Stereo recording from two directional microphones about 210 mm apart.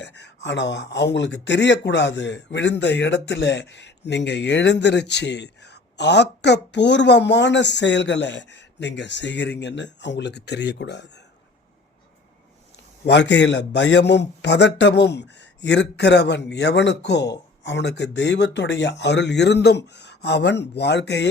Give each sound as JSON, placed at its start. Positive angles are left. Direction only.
{"t": 0.0, "sound": "speech", "side_deg": 55}
{"t": 13.1, "sound": "speech", "side_deg": 55}